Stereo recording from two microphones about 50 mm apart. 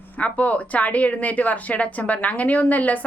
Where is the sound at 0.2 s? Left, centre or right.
Left.